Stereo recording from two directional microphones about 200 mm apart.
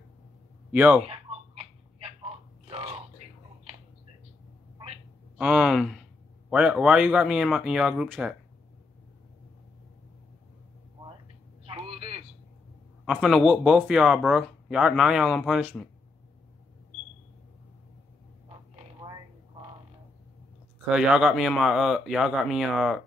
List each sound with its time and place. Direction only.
0.7 s speech: 10° right (ahead or behind)
1.1 s a sound: 30° right (ahead or behind)
5.4 s speech: 5° right (ahead or behind)
11.6 s a sound: 30° right (ahead or behind)
13.0 s speech: centre (ahead or behind)
20.9 s speech: 5° right (ahead or behind)